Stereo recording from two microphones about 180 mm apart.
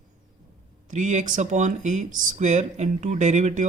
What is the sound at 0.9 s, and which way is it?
Speech, 45° right (ahead or behind).